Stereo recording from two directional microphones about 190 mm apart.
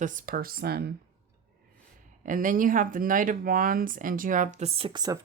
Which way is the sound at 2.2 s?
45° right (ahead or behind).